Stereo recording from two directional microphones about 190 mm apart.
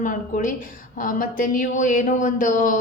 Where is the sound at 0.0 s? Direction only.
45° left (ahead or behind).